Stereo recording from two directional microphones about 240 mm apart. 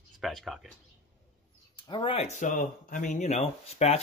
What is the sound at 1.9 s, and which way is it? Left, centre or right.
Speech, left.